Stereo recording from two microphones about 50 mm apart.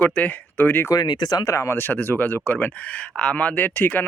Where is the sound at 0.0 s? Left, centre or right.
Left.